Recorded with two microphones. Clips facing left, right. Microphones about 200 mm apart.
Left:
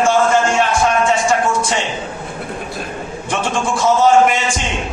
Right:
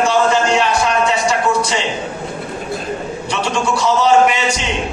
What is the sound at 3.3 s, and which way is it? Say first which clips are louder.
A man's voice: even; 50° left (ahead or behind).